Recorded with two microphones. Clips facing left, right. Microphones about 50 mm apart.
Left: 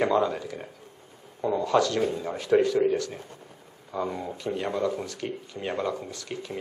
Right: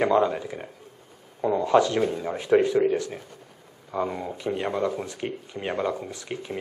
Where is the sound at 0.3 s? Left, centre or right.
Centre.